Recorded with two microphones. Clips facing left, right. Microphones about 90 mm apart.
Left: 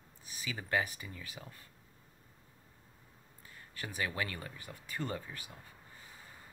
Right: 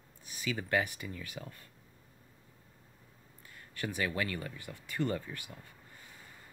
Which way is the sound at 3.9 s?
25° left (ahead or behind).